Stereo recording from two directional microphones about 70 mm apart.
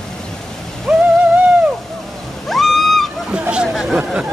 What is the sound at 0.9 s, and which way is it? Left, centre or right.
Music, centre.